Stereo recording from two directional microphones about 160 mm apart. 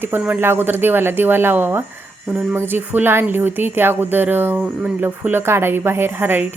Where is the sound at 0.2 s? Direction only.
10° right (ahead or behind).